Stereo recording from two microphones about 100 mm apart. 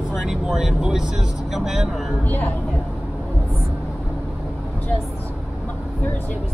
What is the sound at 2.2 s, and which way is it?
Speech, 15° left (ahead or behind).